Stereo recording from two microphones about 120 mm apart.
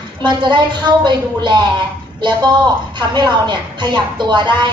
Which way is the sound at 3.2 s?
40° right (ahead or behind).